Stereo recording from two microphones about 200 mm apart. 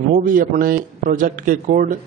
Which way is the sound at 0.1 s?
40° right (ahead or behind).